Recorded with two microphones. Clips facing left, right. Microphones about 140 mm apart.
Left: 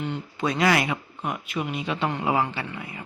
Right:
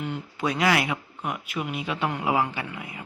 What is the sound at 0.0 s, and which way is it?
Speech, 5° right (ahead or behind).